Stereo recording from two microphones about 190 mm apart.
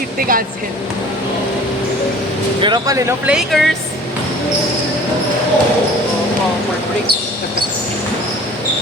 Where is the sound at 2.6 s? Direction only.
25° right (ahead or behind).